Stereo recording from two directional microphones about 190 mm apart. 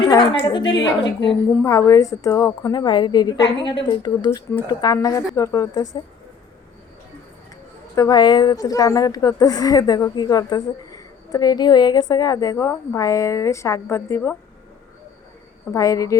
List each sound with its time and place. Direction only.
0.1 s a woman's voice: 20° left (ahead or behind)
7.9 s a woman's voice: 20° left (ahead or behind)
15.7 s a woman's voice: 15° left (ahead or behind)